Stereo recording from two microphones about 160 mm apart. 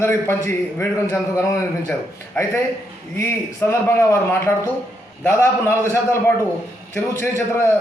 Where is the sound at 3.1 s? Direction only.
15° left (ahead or behind).